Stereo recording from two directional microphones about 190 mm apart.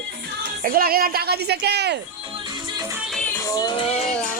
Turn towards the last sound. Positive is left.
turn(degrees=35)  # may be behind; listen again after turning